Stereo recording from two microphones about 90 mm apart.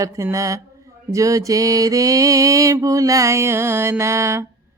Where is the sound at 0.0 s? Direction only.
35° right (ahead or behind).